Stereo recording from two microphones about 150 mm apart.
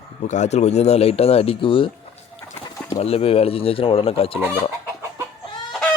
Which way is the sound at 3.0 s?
40° left (ahead or behind).